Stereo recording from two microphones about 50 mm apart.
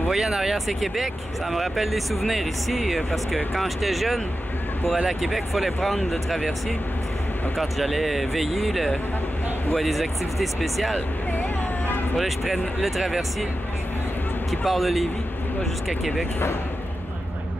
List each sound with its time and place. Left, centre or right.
0.1 s speech: centre
0.7 s speech: centre
7.5 s speech: centre
12.2 s speech: centre
14.5 s speech: centre